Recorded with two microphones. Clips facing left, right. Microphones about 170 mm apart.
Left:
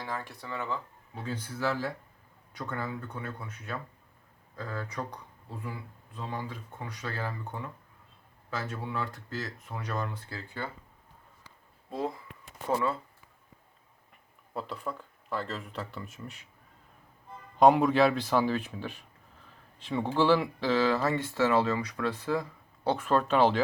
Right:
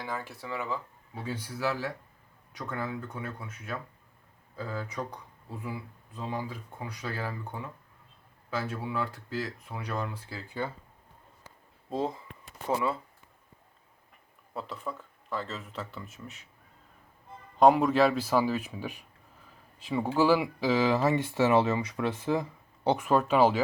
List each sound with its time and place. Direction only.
0.0 s speech: 5° right (ahead or behind)
11.9 s speech: 25° right (ahead or behind)
12.6 s speech: 5° right (ahead or behind)
14.5 s speech: centre (ahead or behind)
17.6 s speech: centre (ahead or behind)